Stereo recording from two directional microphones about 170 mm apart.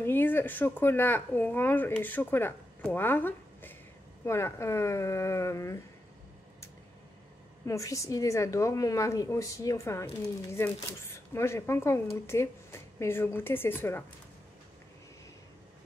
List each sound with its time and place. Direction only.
0.0 s speech: 10° left (ahead or behind)
7.6 s a woman's voice: 20° left (ahead or behind)